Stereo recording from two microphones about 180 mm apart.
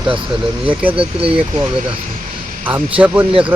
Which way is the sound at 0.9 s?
30° right (ahead or behind).